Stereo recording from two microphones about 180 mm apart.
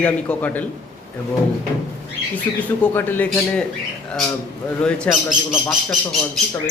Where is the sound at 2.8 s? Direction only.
10° left (ahead or behind).